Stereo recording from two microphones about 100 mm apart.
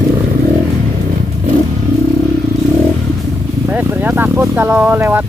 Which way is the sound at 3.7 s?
15° right (ahead or behind).